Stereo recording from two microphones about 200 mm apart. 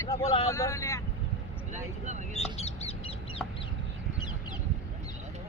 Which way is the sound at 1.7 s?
35° right (ahead or behind).